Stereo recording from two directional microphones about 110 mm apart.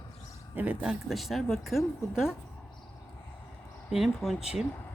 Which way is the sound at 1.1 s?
Centre (ahead or behind).